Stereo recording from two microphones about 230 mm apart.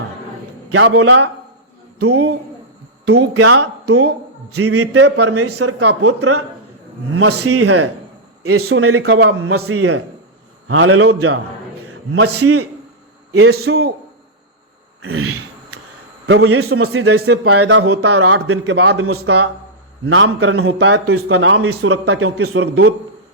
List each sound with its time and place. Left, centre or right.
0.7 s a man's voice: right
15.0 s a sound: right
16.2 s a man's voice: right